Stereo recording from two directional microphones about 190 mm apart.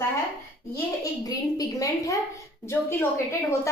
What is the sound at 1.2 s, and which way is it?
A woman's voice, 20° left (ahead or behind).